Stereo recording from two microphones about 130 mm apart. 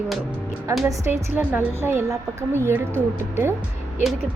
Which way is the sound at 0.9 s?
20° right (ahead or behind).